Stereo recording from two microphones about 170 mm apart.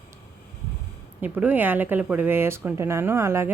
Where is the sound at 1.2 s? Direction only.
10° right (ahead or behind).